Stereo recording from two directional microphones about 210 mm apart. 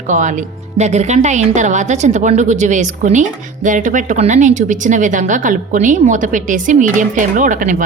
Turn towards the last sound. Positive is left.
turn(degrees=-35)  # may be behind; listen again after turning